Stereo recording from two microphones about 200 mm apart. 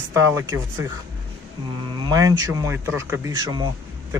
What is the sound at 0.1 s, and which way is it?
Speech, 15° right (ahead or behind).